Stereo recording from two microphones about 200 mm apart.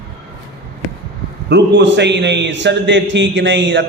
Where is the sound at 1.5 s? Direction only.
60° right (ahead or behind).